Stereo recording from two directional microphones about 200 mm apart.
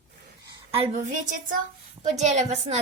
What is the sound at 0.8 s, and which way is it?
A woman's voice, 35° right (ahead or behind).